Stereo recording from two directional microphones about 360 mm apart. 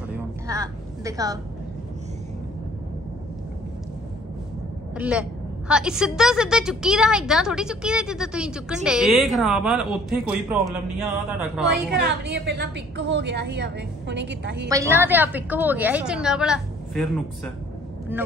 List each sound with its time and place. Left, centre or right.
0.5 s vehicle: centre
4.9 s a woman's voice: centre
11.9 s a woman's voice: right
14.7 s a woman's voice: centre